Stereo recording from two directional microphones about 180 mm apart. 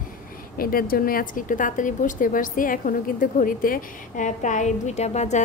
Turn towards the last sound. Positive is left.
turn(degrees=40)  # may be behind; listen again after turning